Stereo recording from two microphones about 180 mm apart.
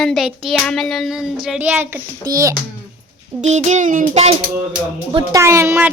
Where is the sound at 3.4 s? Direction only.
40° right (ahead or behind).